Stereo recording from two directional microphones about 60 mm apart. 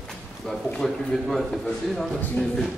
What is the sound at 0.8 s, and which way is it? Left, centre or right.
A man's voice, centre.